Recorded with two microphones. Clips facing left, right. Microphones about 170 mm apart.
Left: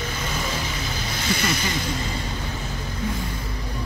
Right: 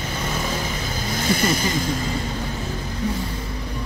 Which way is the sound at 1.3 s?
45° right (ahead or behind).